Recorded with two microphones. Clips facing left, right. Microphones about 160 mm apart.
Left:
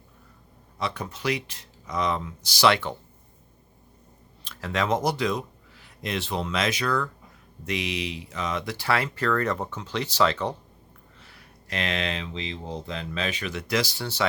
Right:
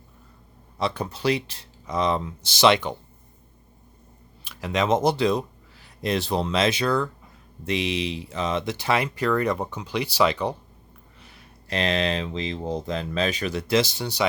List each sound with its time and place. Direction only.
0.8 s speech: 30° right (ahead or behind)
4.4 s speech: 15° right (ahead or behind)
11.2 s a sound: 20° right (ahead or behind)
11.7 s speech: 35° right (ahead or behind); by 14.3 s 15° right (ahead or behind)